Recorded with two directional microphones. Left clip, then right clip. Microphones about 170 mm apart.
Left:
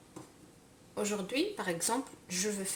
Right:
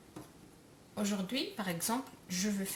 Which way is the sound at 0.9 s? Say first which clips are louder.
Left 3 dB; 25° left (ahead or behind).